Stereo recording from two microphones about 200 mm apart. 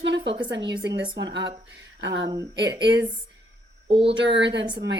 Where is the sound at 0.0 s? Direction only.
60° right (ahead or behind).